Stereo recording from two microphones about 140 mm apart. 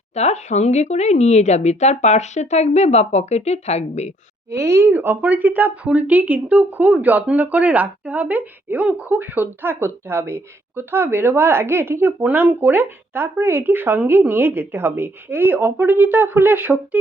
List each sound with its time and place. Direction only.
0.1 s speech: 50° left (ahead or behind)
4.5 s speech: 20° right (ahead or behind)